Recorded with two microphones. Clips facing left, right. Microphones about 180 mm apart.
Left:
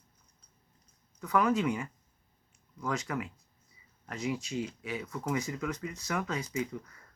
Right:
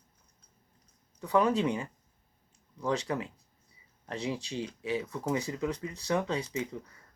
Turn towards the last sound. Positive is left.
turn(degrees=-30)  # may be behind; listen again after turning